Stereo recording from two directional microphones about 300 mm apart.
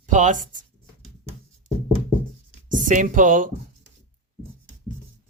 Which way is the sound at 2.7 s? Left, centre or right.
Right.